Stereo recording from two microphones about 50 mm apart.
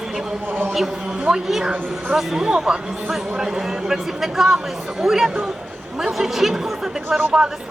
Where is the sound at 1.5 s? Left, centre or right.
Centre.